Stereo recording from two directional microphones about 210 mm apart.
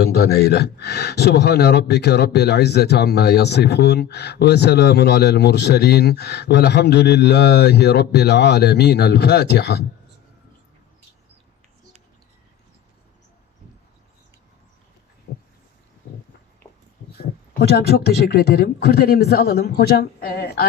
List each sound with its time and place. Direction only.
0.0 s speech: 50° left (ahead or behind)
15.3 s a sound: 45° left (ahead or behind)
17.6 s speech: 50° left (ahead or behind)